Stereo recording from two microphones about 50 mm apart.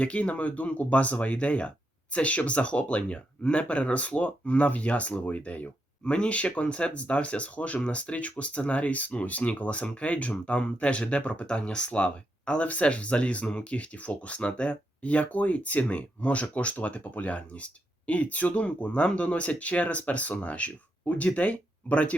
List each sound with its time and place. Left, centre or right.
0.0 s speech: left